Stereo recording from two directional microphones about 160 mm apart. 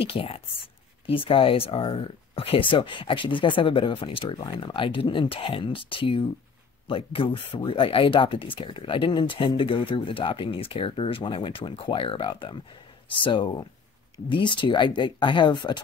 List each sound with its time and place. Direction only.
0.0 s speech: 35° left (ahead or behind)